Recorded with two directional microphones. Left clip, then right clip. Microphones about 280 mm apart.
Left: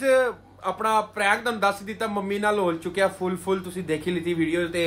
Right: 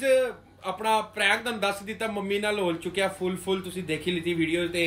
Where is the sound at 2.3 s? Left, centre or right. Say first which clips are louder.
Left 3 dB; left.